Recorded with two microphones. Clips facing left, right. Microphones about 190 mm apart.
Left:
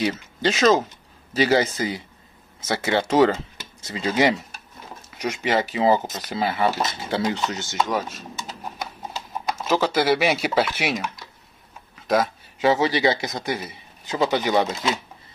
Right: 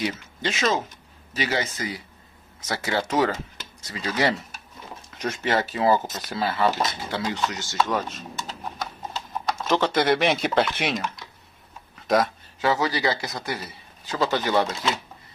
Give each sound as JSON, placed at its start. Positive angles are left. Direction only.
{"t": 0.0, "sound": "speech", "side_deg": 40}
{"t": 5.1, "sound": "speech", "side_deg": 15}
{"t": 11.9, "sound": "a sound", "side_deg": 0}
{"t": 12.5, "sound": "speech", "side_deg": 20}